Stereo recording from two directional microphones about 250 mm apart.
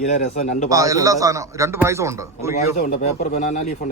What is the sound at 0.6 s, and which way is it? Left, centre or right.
A man's voice, centre.